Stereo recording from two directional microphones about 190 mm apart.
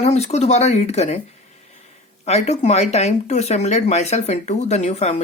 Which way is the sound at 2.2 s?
35° left (ahead or behind).